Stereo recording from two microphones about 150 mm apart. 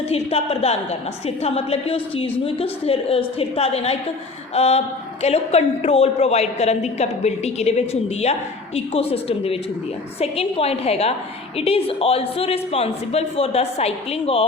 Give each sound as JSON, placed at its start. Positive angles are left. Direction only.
{"t": 0.1, "sound": "a woman's voice", "side_deg": 45}